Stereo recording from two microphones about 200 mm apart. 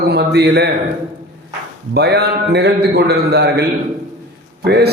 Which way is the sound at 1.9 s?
55° right (ahead or behind).